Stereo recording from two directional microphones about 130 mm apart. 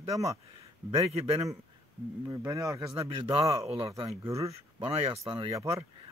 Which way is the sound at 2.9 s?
40° right (ahead or behind).